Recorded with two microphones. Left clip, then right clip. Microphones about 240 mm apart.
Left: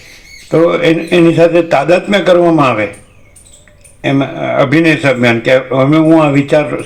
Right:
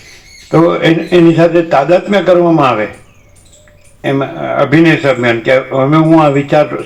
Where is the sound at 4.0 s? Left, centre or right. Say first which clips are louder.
Left 1 dB; left.